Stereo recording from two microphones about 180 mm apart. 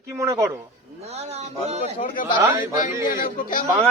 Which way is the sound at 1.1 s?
35° right (ahead or behind).